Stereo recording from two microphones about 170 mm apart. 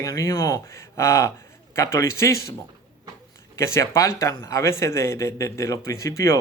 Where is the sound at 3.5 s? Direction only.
15° left (ahead or behind).